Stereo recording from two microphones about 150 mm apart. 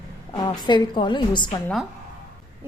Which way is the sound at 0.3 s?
30° left (ahead or behind).